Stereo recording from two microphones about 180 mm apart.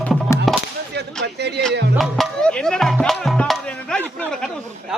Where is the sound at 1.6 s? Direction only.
70° right (ahead or behind).